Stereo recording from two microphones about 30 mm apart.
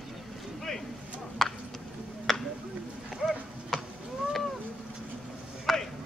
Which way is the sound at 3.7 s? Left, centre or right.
Centre.